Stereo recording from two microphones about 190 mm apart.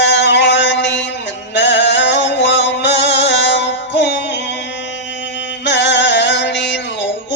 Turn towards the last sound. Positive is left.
turn(degrees=70)  # may be behind; listen again after turning